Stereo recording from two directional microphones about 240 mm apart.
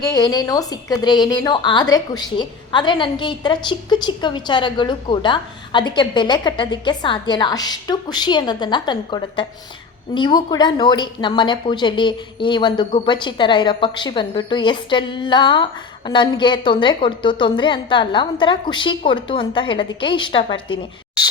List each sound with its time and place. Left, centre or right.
0.0 s a woman's voice: centre